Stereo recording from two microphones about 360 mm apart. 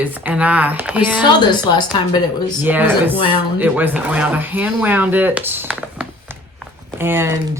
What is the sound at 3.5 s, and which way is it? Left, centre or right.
Speech, centre.